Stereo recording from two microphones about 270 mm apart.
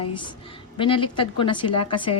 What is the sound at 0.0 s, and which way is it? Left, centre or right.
A woman's voice, centre.